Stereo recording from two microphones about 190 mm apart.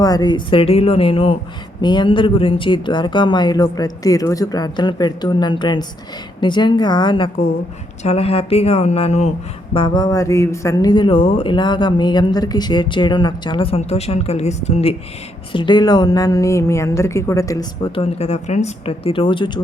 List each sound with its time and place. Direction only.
0.0 s speech: 20° left (ahead or behind)